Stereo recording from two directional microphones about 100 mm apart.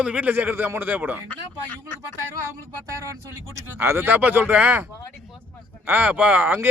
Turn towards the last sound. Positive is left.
turn(degrees=-20)  # may be behind; listen again after turning